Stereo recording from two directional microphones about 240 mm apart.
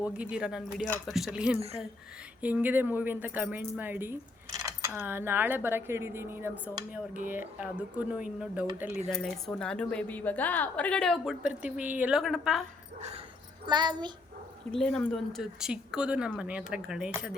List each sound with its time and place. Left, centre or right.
0.2 s a woman's voice: centre
1.5 s speech: right
2.4 s a woman's voice: centre
13.0 s dog: right
13.7 s speech: centre
14.7 s a woman's voice: centre